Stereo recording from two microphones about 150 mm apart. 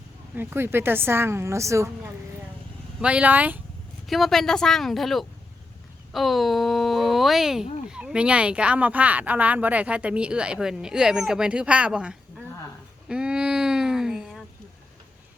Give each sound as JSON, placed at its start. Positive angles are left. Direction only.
{"t": 0.3, "sound": "speech", "side_deg": -15}
{"t": 3.0, "sound": "speech", "side_deg": -10}
{"t": 4.0, "sound": "speech", "side_deg": 0}
{"t": 13.1, "sound": "a sound", "side_deg": -5}